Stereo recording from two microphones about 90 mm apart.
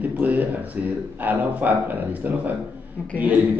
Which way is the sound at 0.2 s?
20° right (ahead or behind).